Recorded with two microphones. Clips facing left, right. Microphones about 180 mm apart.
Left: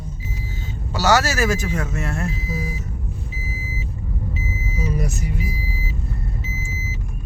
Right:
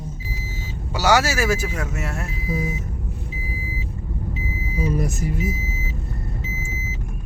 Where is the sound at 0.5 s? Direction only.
10° right (ahead or behind).